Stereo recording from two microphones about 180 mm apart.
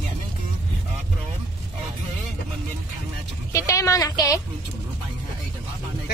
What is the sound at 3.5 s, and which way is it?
Speech, 15° left (ahead or behind).